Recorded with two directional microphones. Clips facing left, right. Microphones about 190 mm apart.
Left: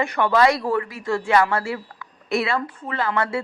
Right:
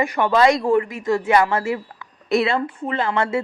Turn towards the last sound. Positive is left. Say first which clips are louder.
# right 3 dB
turn(degrees=-25)  # may be behind; listen again after turning